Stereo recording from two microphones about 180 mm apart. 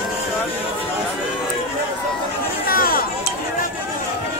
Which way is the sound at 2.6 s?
55° left (ahead or behind).